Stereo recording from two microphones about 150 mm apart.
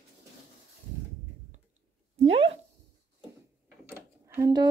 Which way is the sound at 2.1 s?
40° right (ahead or behind).